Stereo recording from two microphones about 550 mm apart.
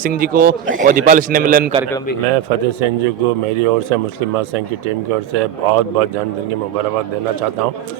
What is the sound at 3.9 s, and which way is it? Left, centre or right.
Speech, right.